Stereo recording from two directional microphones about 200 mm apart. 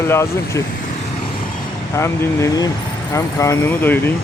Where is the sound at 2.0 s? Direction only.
15° left (ahead or behind).